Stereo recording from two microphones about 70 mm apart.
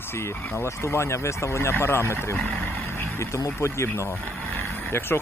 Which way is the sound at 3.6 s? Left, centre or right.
Left.